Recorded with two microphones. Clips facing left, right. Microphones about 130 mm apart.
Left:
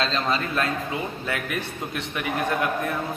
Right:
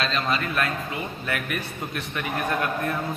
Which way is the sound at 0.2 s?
25° left (ahead or behind).